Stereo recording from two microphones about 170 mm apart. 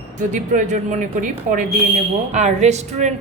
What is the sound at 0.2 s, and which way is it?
A woman's voice, 45° right (ahead or behind).